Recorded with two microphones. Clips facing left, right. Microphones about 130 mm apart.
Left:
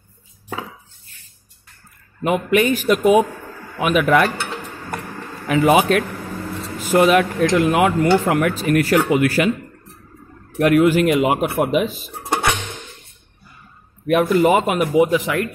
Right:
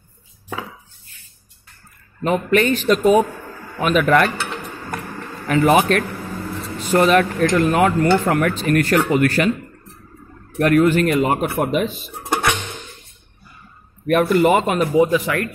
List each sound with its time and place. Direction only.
2.2 s speech: 10° left (ahead or behind)
3.7 s cutlery: 10° left (ahead or behind)
5.5 s speech: 10° left (ahead or behind)
10.5 s speech: 5° left (ahead or behind)
14.0 s speech: centre (ahead or behind)
15.0 s speech: 20° left (ahead or behind)